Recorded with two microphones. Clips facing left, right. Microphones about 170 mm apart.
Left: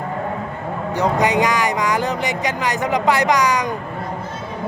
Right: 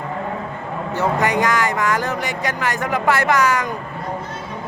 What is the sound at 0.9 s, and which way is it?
Speech, 15° left (ahead or behind).